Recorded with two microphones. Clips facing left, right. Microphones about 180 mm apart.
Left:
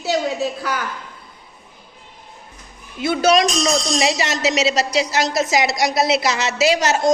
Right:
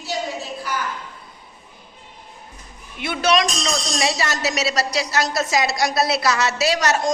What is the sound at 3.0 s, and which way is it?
A woman's voice, 30° left (ahead or behind).